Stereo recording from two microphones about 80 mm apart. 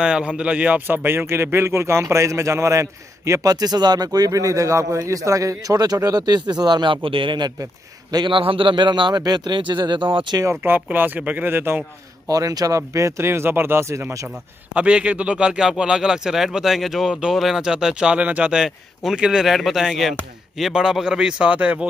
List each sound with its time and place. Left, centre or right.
0.0 s speech: centre; by 3.5 s right
3.5 s speech: right
9.2 s speech: right
10.6 s speech: right
12.3 s speech: right
14.7 s speech: centre